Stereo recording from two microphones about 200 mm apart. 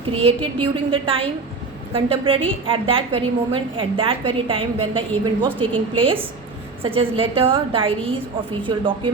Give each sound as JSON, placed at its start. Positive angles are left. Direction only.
{"t": 0.0, "sound": "a woman's voice", "side_deg": -30}